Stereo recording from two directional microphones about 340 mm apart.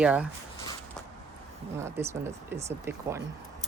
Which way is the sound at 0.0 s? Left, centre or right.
Centre.